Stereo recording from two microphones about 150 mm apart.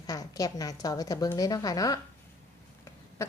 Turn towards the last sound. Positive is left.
turn(degrees=20)  # may be behind; listen again after turning